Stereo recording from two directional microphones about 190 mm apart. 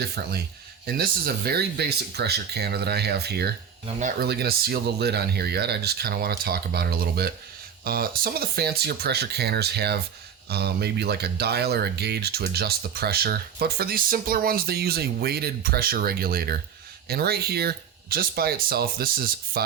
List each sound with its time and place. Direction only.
0.0 s speech: 55° right (ahead or behind)